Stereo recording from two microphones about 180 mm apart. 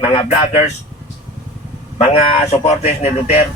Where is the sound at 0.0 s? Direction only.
30° left (ahead or behind).